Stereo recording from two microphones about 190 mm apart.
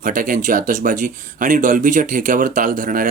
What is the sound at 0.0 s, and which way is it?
Speech, 45° right (ahead or behind).